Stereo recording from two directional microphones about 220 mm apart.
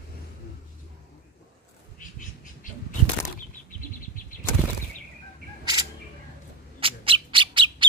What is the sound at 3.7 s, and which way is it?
Bird, 40° left (ahead or behind).